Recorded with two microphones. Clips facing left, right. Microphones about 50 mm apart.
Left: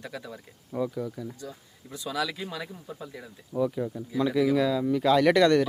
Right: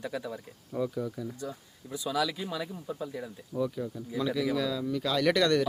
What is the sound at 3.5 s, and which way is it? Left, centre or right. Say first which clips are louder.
Speech: left 4 dB; centre.